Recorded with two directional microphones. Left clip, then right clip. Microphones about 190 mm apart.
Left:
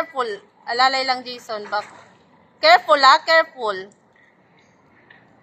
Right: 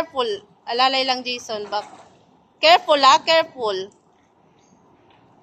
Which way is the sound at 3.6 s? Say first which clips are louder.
Right 1 dB; 15° right (ahead or behind).